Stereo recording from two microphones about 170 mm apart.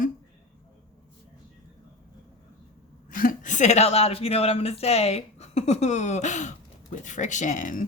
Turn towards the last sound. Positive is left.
turn(degrees=50)  # may be behind; listen again after turning